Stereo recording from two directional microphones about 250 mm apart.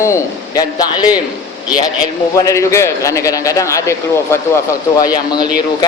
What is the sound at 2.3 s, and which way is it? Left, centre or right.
A man's voice, centre.